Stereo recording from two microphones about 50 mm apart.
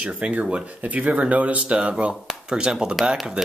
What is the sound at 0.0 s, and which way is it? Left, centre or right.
Speech, right.